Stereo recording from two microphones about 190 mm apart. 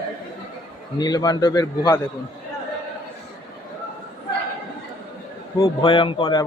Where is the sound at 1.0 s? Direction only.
20° left (ahead or behind).